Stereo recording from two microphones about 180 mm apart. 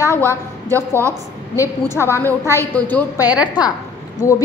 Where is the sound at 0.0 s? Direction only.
15° left (ahead or behind).